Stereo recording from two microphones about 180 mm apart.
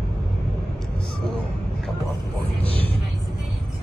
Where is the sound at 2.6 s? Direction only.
30° right (ahead or behind).